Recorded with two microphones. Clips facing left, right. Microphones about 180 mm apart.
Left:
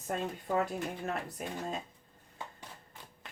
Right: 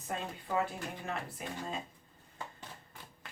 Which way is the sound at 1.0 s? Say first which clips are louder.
Left 3 dB; 45° left (ahead or behind).